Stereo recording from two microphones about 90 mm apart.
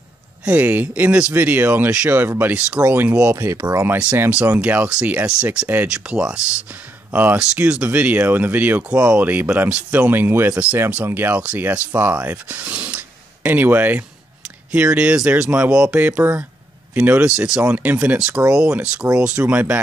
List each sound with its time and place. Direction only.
0.5 s speech: 20° right (ahead or behind)
4.6 s speech: 15° right (ahead or behind)